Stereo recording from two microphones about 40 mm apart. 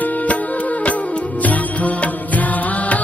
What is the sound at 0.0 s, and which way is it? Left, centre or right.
Music, left.